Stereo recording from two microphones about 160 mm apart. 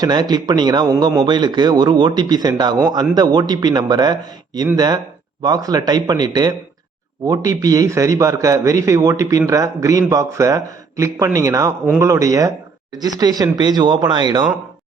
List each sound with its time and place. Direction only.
0.0 s a man's voice: 25° right (ahead or behind)